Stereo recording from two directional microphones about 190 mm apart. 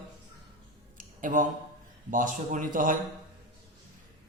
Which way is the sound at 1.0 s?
45° right (ahead or behind).